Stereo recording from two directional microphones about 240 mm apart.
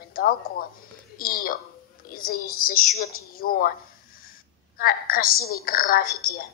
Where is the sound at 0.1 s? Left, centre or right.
Left.